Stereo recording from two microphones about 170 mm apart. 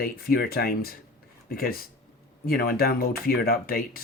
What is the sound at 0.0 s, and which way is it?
Speech, 60° left (ahead or behind).